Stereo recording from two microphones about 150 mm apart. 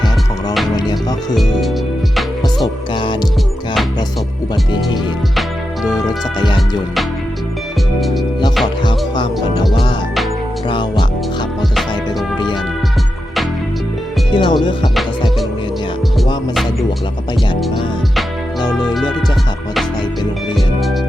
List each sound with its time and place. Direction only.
0.8 s music: 25° left (ahead or behind)
5.9 s music: 25° left (ahead or behind)
8.6 s music: 30° left (ahead or behind)
14.3 s music: 30° left (ahead or behind)